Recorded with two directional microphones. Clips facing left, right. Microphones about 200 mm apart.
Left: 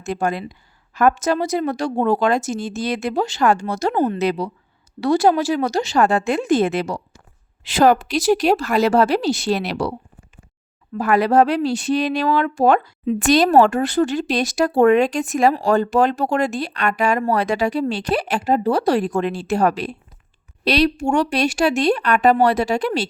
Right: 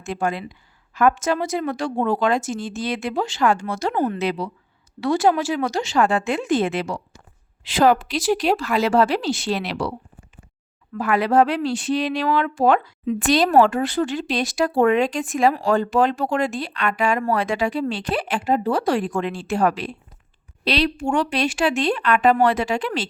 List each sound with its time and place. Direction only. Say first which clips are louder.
0.0 s speech: left 2 dB; 40° left (ahead or behind)
10.9 s speech: left 2 dB; 40° left (ahead or behind)